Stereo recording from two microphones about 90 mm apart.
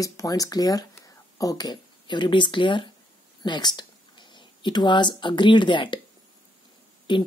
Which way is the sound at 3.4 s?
55° left (ahead or behind).